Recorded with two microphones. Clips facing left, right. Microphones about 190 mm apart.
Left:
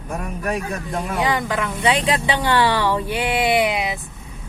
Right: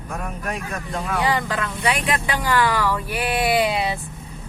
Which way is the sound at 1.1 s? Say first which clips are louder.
Left 1 dB; 20° left (ahead or behind).